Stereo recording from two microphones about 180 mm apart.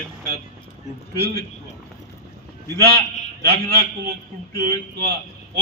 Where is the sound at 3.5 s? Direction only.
60° right (ahead or behind).